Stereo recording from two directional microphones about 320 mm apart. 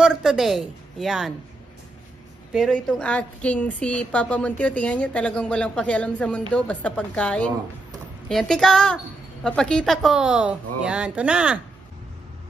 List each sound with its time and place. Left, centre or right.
0.0 s a woman's voice: centre
2.5 s a woman's voice: centre